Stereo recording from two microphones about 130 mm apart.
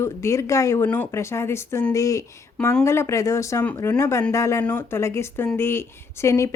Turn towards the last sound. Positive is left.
turn(degrees=20)  # may be behind; listen again after turning